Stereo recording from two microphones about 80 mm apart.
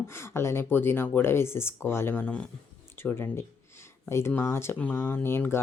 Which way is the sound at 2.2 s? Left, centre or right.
Centre.